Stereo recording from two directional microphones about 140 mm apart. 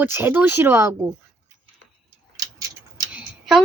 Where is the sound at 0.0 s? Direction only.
15° right (ahead or behind).